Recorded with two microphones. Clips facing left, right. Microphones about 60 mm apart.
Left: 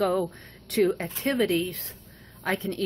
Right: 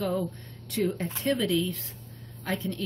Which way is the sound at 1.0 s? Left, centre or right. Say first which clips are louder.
Left 2 dB; left.